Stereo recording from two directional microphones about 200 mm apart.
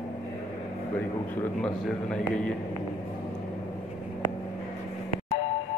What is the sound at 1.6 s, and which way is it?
Speech, 5° left (ahead or behind).